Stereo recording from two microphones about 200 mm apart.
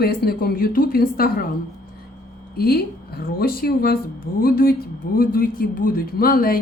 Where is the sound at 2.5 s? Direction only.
50° left (ahead or behind).